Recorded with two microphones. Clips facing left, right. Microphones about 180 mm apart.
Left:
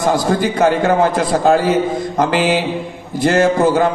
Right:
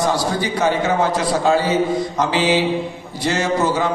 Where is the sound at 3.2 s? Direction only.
55° left (ahead or behind).